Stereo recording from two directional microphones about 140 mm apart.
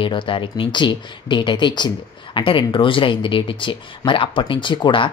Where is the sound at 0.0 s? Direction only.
35° left (ahead or behind).